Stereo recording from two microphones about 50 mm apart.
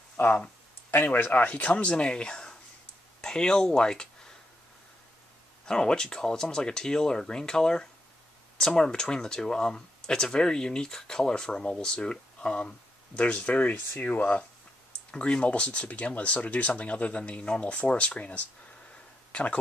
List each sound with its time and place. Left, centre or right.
0.2 s speech: left; by 4.4 s centre
5.7 s speech: centre